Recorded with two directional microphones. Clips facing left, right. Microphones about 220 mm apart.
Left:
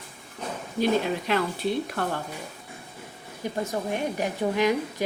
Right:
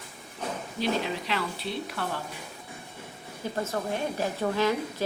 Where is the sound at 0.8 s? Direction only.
50° left (ahead or behind).